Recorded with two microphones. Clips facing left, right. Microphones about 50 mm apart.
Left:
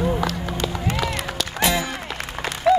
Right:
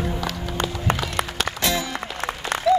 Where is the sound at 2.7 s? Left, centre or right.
Left.